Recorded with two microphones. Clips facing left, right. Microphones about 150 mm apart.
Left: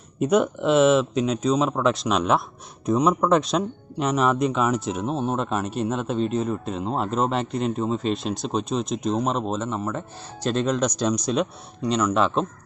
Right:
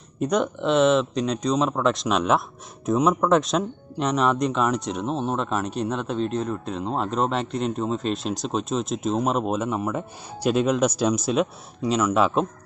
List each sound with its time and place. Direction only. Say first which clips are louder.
0.2 s speech: left 3 dB; 5° left (ahead or behind)